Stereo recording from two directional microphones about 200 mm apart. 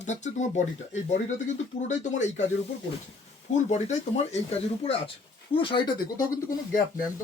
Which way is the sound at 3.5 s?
35° left (ahead or behind).